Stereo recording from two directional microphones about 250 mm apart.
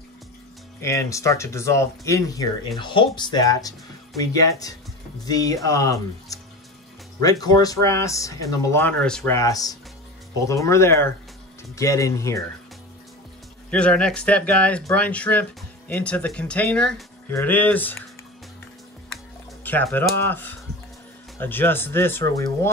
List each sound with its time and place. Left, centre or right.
0.7 s speech: centre
13.7 s speech: centre
19.6 s speech: centre